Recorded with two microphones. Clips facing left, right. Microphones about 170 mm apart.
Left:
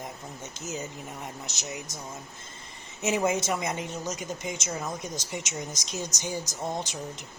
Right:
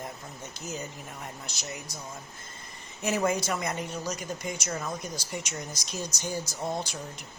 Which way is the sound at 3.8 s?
20° left (ahead or behind).